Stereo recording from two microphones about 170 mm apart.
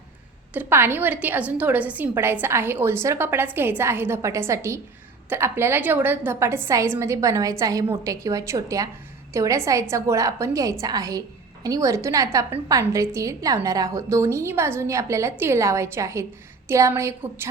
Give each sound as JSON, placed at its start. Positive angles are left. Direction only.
{"t": 0.5, "sound": "a woman's voice", "side_deg": -10}